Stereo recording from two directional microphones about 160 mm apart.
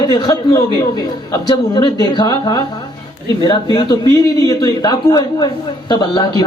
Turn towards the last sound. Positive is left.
turn(degrees=25)  # may be behind; listen again after turning